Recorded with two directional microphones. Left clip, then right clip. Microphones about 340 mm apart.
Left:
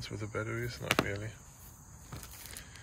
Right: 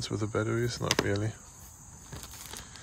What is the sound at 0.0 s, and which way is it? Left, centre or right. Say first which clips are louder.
Speech: right 7 dB; centre.